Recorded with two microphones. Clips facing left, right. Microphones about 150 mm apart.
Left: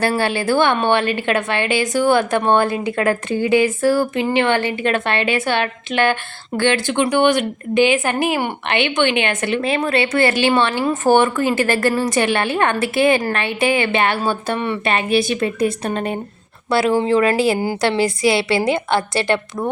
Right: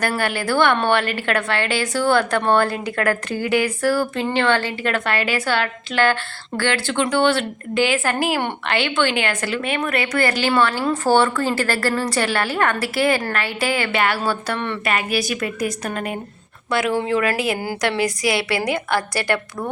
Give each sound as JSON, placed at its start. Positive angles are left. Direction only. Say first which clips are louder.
{"t": 0.1, "sound": "speech", "louder": "left 4 dB", "side_deg": 25}
{"t": 9.6, "sound": "speech", "louder": "left 6 dB", "side_deg": 35}